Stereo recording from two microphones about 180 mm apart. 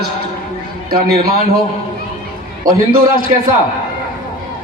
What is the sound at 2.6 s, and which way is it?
Speech, 50° right (ahead or behind).